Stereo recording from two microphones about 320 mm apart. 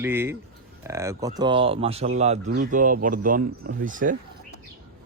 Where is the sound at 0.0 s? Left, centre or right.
Centre.